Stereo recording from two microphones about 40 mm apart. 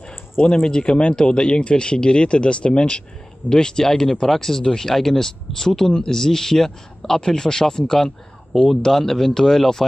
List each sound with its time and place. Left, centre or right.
0.5 s speech: centre